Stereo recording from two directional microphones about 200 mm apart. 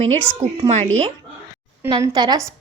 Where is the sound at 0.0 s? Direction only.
30° right (ahead or behind).